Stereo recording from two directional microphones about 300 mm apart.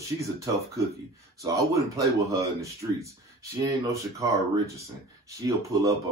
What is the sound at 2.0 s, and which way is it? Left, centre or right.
Speech, centre.